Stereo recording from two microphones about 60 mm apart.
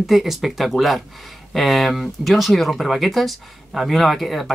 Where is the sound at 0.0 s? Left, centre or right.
Centre.